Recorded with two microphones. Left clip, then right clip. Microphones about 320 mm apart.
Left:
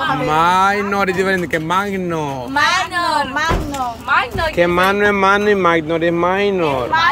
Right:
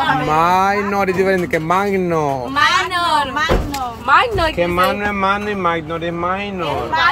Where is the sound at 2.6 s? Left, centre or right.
Centre.